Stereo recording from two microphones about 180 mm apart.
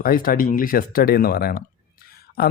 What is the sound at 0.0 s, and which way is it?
Speech, 55° left (ahead or behind).